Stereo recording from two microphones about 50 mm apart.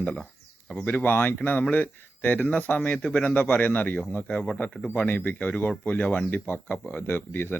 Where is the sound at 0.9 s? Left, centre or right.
Left.